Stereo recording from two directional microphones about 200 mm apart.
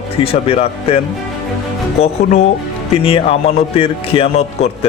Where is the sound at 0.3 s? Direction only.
30° left (ahead or behind).